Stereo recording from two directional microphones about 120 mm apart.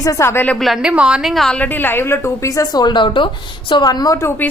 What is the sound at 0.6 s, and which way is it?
Speech, 5° right (ahead or behind).